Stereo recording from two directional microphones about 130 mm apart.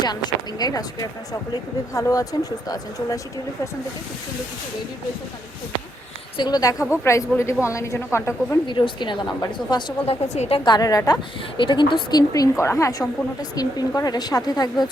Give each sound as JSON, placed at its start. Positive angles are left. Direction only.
{"t": 0.0, "sound": "a woman's voice", "side_deg": 35}
{"t": 6.3, "sound": "a woman's voice", "side_deg": 35}
{"t": 8.6, "sound": "speech", "side_deg": 35}
{"t": 10.1, "sound": "speech", "side_deg": 60}
{"t": 10.7, "sound": "a woman's voice", "side_deg": 30}